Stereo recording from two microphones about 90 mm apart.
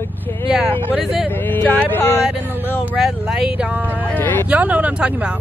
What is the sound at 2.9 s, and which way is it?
Speech, 5° right (ahead or behind).